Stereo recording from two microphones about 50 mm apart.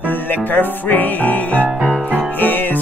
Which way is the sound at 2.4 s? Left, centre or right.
Left.